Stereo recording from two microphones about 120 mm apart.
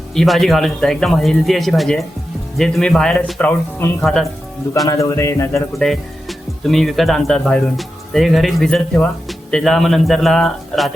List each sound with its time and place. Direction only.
0.1 s speech: centre (ahead or behind)
4.9 s speech: 25° left (ahead or behind)
5.8 s speech: centre (ahead or behind)